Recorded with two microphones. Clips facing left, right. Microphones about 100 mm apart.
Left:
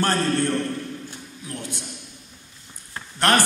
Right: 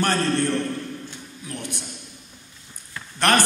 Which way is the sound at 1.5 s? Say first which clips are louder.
Even; 20° right (ahead or behind).